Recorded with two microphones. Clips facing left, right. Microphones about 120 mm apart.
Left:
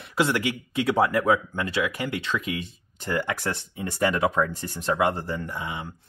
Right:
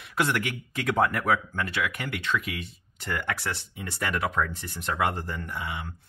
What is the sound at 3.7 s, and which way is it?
Speech, 30° left (ahead or behind).